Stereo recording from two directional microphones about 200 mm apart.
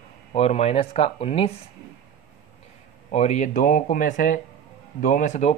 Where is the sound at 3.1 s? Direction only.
35° left (ahead or behind).